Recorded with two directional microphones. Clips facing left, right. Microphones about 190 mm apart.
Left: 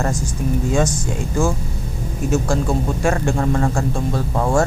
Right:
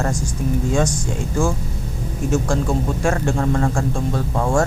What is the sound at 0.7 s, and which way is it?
Speech, 5° left (ahead or behind).